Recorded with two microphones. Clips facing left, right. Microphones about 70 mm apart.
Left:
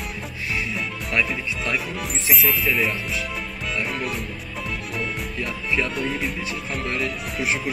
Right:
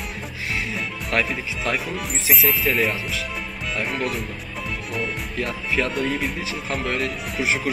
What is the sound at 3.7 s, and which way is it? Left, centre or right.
Speech, centre.